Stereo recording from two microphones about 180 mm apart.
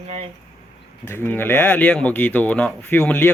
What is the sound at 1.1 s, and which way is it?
Speech, 10° left (ahead or behind).